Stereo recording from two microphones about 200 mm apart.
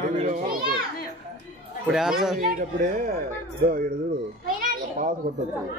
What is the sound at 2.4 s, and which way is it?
Speech, 45° right (ahead or behind).